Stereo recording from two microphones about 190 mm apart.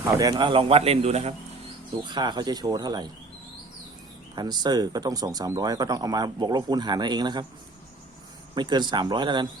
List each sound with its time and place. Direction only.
0.2 s speech: 20° right (ahead or behind)
2.0 s speech: 25° right (ahead or behind)
4.4 s speech: 20° right (ahead or behind)
8.5 s speech: 25° right (ahead or behind)